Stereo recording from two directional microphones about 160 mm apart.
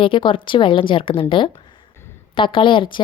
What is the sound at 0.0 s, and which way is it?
A woman's voice, 30° left (ahead or behind).